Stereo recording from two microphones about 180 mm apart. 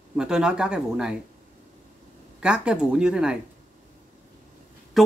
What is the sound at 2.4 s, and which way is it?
Speech, 5° right (ahead or behind).